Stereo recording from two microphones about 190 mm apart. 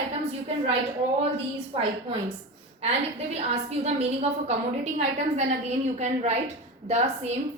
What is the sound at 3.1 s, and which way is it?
A woman's voice, 35° right (ahead or behind).